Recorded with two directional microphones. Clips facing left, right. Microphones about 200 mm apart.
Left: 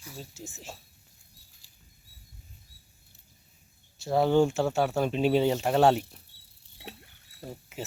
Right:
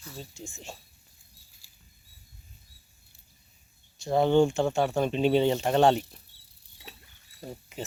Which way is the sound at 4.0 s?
5° left (ahead or behind).